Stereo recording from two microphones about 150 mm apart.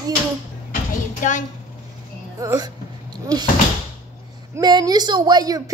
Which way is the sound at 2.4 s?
25° right (ahead or behind).